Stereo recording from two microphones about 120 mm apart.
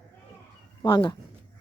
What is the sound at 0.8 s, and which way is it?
Speech, 40° left (ahead or behind).